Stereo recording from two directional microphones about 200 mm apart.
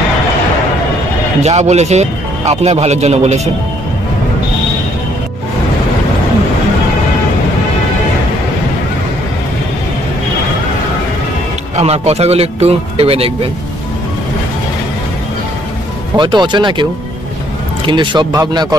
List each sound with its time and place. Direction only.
1.4 s a man's voice: 35° right (ahead or behind)
11.7 s a man's voice: 30° right (ahead or behind)
16.2 s speech: 20° right (ahead or behind)
17.8 s speech: 25° right (ahead or behind)